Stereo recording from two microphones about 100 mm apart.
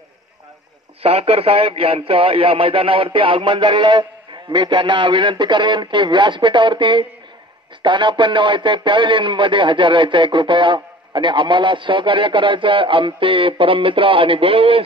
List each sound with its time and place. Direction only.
1.0 s a man's voice: 75° right (ahead or behind)